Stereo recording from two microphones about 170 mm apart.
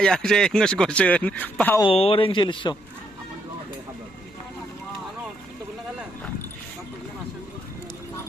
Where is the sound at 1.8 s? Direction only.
35° left (ahead or behind).